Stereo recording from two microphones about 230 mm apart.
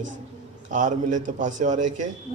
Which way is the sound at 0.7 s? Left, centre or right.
Right.